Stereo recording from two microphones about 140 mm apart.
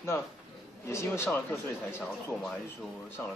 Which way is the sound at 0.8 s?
20° left (ahead or behind).